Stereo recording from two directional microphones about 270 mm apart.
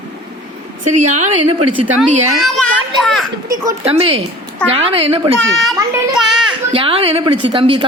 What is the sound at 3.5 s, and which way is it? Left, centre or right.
A woman's voice, centre.